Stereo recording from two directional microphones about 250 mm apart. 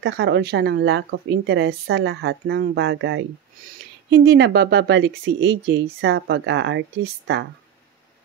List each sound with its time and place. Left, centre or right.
0.0 s speech: right